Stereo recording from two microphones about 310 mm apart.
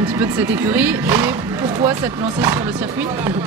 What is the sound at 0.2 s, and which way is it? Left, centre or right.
Speech, centre.